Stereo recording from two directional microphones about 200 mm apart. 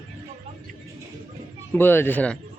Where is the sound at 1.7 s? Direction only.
10° left (ahead or behind).